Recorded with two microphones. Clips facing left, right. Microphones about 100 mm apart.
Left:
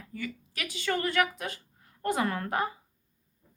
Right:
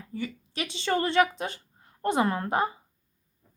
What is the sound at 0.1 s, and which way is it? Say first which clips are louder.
A woman's voice: right 4 dB; 25° right (ahead or behind).